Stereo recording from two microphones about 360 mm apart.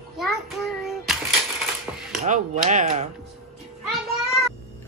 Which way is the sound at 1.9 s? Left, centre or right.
Centre.